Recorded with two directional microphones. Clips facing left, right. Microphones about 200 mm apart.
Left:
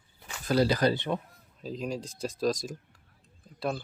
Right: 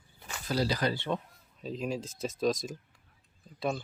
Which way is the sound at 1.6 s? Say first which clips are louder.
Even; centre (ahead or behind).